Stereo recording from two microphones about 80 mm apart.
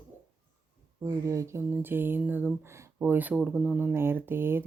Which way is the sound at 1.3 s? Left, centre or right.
Right.